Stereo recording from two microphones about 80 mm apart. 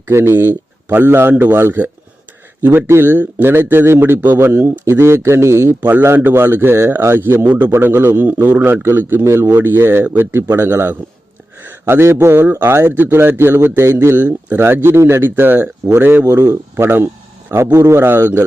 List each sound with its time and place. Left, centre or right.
0.0 s a man's voice: right
11.6 s a sound: right
12.2 s speech: right
16.2 s a man's voice: right